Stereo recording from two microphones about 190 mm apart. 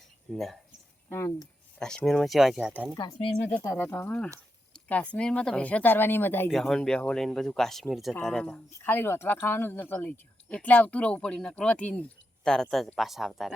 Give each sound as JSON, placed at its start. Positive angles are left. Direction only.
{"t": 0.3, "sound": "speech", "side_deg": 0}
{"t": 1.1, "sound": "speech", "side_deg": 15}
{"t": 2.9, "sound": "speech", "side_deg": 20}